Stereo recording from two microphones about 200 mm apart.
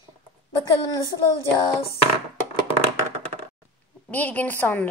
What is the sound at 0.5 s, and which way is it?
Speech, 15° left (ahead or behind).